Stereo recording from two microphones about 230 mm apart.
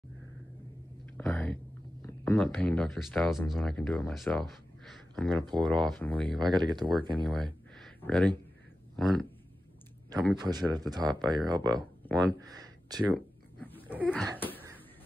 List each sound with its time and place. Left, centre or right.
1.1 s a sound: centre
2.3 s speech: centre
6.5 s speech: centre
7.2 s a sound: centre
8.9 s speech: centre
10.3 s speech: centre
12.1 s speech: centre
12.4 s speech: centre
13.6 s dog: centre
13.8 s a sound: centre